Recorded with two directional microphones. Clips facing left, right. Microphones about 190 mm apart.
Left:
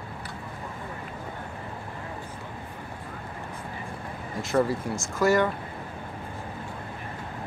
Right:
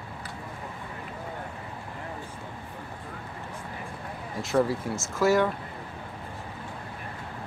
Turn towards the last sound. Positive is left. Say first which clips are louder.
# even
turn(degrees=0)  # may be behind; listen again after turning